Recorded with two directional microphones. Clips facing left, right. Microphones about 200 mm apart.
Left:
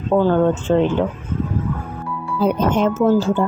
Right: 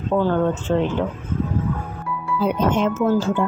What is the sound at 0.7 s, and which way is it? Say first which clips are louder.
Speech: left 4 dB; 20° left (ahead or behind).